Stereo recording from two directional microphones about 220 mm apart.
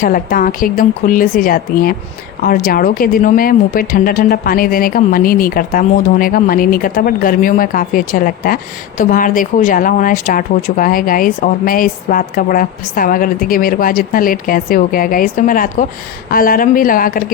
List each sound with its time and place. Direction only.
0.0 s a woman's voice: 40° left (ahead or behind)